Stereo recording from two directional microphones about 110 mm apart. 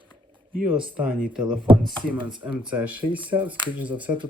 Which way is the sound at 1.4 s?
45° right (ahead or behind).